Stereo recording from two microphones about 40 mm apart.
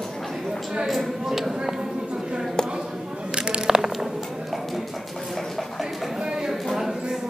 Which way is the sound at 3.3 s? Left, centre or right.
Right.